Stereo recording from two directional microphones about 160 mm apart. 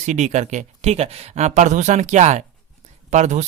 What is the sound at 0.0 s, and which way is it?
Speech, 45° right (ahead or behind).